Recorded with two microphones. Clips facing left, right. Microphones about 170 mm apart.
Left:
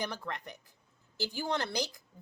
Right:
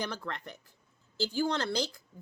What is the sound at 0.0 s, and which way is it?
A woman's voice, 15° left (ahead or behind).